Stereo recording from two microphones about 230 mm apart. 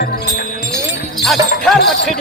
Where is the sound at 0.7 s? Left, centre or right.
Centre.